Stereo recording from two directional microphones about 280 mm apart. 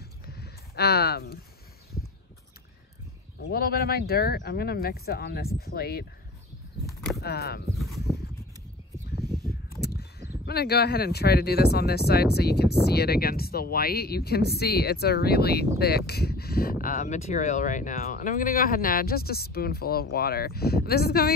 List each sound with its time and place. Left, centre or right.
0.4 s speech: left
3.3 s speech: left
7.2 s speech: left
9.8 s a sound: left
10.4 s speech: left